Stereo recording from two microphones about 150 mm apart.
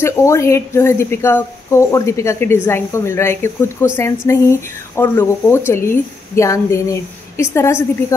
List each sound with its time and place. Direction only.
0.0 s a woman's voice: 20° left (ahead or behind)